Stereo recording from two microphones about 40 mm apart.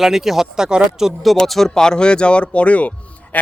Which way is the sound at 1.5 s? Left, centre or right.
Centre.